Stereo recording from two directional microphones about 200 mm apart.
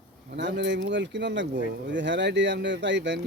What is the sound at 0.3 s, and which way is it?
Speech, 60° right (ahead or behind).